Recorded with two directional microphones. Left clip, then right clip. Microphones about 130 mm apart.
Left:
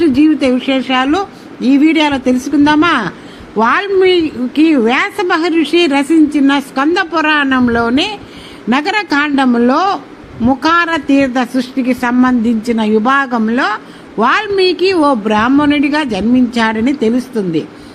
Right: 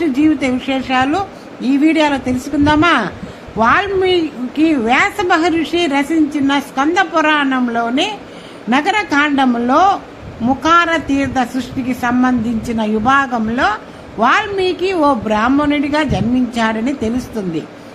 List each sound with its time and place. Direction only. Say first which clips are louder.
0.0 s a woman's voice: left 4 dB; 15° left (ahead or behind)